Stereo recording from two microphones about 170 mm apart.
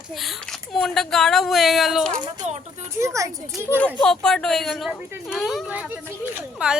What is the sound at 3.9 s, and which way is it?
Speech, 5° left (ahead or behind).